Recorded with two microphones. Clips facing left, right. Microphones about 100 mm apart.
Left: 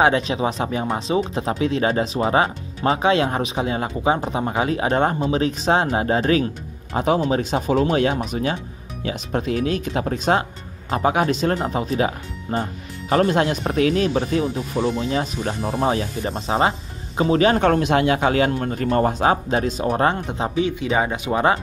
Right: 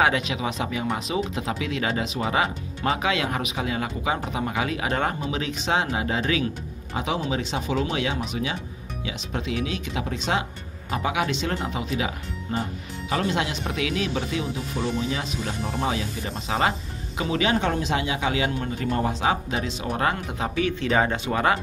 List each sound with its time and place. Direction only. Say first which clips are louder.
0.0 s a man's voice: left 5 dB; 35° left (ahead or behind)